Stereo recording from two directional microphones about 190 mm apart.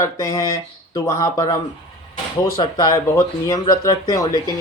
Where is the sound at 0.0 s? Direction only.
15° left (ahead or behind).